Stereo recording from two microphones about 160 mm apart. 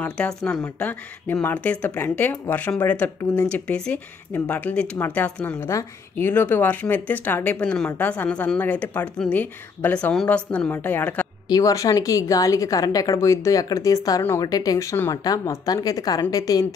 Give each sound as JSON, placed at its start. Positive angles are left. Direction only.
{"t": 0.0, "sound": "speech", "side_deg": 10}
{"t": 11.4, "sound": "a woman's voice", "side_deg": 20}